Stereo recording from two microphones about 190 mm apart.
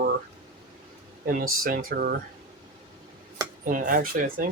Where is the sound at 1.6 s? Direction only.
50° right (ahead or behind).